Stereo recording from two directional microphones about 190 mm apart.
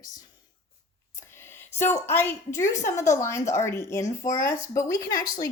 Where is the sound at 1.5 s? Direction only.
10° left (ahead or behind).